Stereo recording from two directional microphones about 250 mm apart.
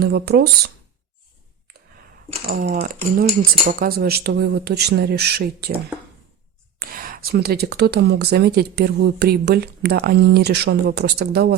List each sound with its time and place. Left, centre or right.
0.0 s speech: right
2.5 s speech: right
6.7 s speech: right